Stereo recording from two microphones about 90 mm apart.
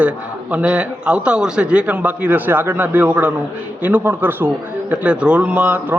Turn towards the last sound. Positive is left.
turn(degrees=-20)  # may be behind; listen again after turning